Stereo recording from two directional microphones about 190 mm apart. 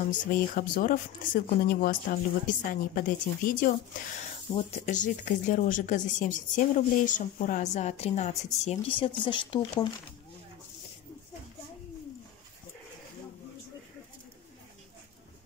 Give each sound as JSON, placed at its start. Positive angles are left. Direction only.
{"t": 0.0, "sound": "a woman's voice", "side_deg": 45}